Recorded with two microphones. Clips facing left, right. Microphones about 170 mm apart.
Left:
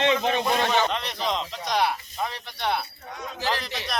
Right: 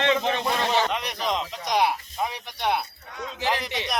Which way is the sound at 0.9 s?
10° right (ahead or behind).